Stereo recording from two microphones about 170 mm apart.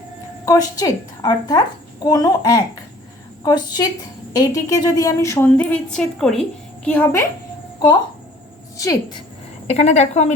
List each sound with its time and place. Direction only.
0.4 s a woman's voice: 20° left (ahead or behind)
8.8 s a woman's voice: 20° left (ahead or behind)
9.6 s a woman's voice: 40° left (ahead or behind)